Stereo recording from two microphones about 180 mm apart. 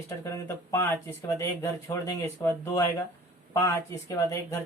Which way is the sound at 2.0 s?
15° left (ahead or behind).